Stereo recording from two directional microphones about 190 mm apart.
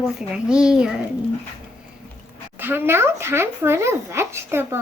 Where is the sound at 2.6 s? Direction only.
10° right (ahead or behind).